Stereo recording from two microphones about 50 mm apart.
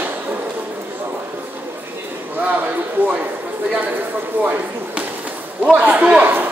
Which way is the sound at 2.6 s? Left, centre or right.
Right.